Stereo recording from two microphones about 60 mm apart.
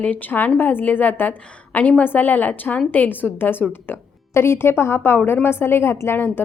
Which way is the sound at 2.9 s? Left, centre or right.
Left.